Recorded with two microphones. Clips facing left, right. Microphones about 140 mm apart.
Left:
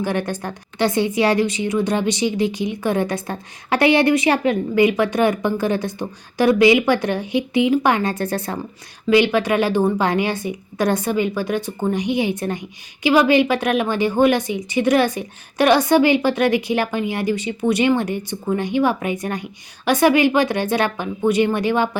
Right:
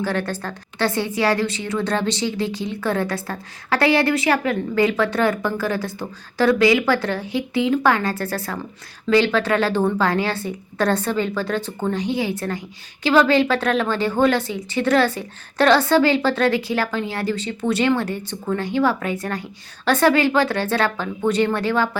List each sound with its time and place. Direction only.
0.0 s a woman's voice: 15° left (ahead or behind)